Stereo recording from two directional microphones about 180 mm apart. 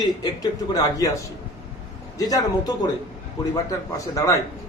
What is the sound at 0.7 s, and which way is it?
Speech, 20° left (ahead or behind).